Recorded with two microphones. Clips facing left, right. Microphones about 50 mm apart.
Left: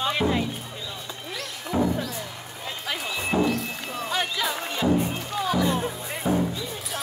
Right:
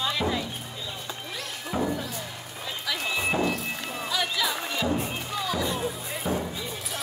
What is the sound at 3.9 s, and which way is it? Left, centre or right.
Music, left.